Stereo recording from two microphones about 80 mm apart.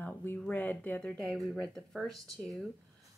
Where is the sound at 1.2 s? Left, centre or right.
Centre.